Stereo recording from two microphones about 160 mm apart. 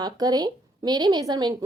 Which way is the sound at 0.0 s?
25° right (ahead or behind).